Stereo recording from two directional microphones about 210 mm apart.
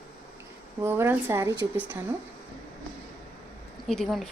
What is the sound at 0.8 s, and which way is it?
Speech, 10° right (ahead or behind).